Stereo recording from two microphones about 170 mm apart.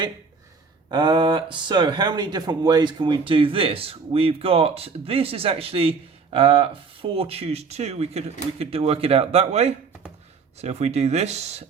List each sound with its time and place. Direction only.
0.9 s speech: 25° right (ahead or behind)